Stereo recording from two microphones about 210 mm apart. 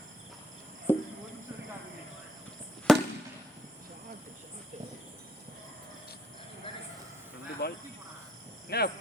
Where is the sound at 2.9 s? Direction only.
Centre (ahead or behind).